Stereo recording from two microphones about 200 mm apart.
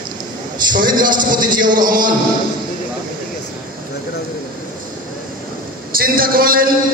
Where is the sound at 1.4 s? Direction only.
20° right (ahead or behind).